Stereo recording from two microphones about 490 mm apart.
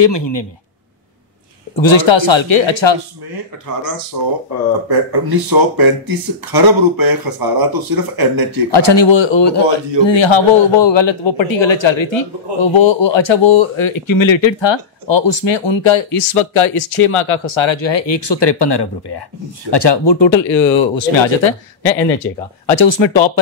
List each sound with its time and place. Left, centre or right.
0.0 s a man's voice: left
1.8 s a man's voice: left
4.5 s speech: right
8.7 s a man's voice: left
22.2 s speech: centre
22.8 s a man's voice: left